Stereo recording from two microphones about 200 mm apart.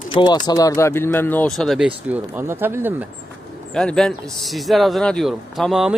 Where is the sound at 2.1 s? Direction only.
10° right (ahead or behind).